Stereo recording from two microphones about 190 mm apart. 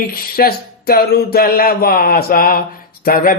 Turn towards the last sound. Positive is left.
turn(degrees=50)  # may be behind; listen again after turning